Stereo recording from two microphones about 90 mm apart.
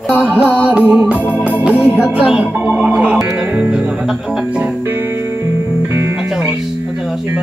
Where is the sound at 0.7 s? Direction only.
15° right (ahead or behind).